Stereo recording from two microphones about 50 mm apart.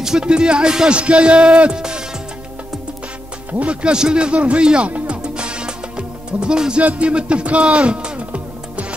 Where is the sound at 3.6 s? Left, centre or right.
Right.